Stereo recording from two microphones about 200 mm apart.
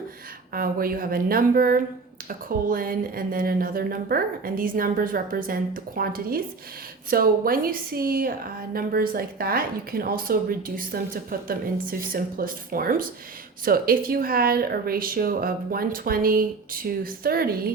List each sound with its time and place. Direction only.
0.5 s a woman's voice: 45° right (ahead or behind)